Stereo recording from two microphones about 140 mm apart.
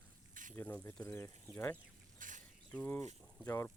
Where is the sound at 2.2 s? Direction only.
70° right (ahead or behind).